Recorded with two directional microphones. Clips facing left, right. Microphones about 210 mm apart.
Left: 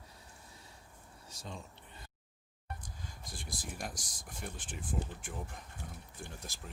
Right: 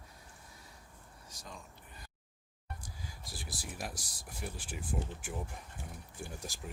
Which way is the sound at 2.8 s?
5° right (ahead or behind).